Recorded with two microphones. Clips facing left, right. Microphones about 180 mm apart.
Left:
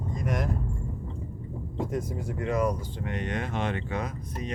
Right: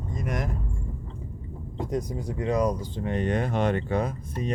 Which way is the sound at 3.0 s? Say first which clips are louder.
Right 6 dB; 30° right (ahead or behind).